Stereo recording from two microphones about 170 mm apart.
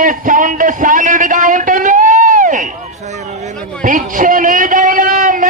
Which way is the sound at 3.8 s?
50° right (ahead or behind).